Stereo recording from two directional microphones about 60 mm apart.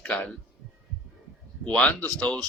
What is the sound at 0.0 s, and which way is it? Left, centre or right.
Speech, left.